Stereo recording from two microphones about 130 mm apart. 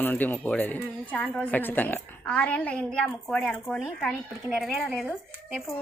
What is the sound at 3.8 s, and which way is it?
Speech, centre (ahead or behind).